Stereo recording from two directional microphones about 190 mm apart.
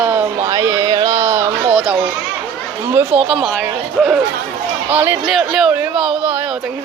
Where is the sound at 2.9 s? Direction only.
10° right (ahead or behind).